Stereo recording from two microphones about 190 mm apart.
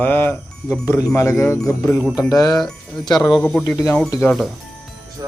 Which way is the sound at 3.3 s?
10° left (ahead or behind).